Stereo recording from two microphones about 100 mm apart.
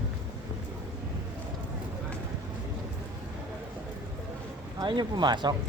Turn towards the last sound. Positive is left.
turn(degrees=-50)  # may be behind; listen again after turning